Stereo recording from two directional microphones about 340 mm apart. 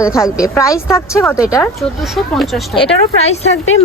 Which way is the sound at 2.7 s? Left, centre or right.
Centre.